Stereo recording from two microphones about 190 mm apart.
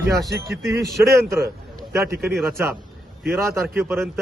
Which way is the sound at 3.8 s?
15° right (ahead or behind).